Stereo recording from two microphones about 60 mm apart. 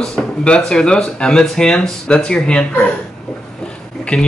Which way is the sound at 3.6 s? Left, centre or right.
Centre.